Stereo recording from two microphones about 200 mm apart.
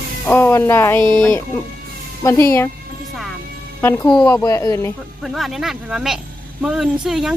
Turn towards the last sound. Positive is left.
turn(degrees=0)  # may be behind; listen again after turning